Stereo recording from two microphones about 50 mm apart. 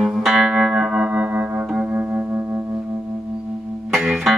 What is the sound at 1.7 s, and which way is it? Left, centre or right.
Keyboard, right.